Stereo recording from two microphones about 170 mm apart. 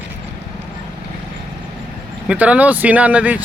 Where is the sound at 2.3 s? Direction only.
10° right (ahead or behind).